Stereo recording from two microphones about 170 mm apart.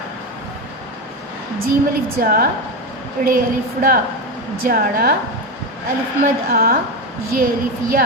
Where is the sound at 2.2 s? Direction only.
60° right (ahead or behind).